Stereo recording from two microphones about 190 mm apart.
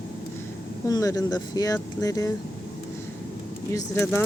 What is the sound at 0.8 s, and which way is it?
Speech, 20° left (ahead or behind).